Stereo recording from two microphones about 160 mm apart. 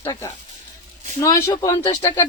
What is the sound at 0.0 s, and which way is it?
Speech, 20° left (ahead or behind).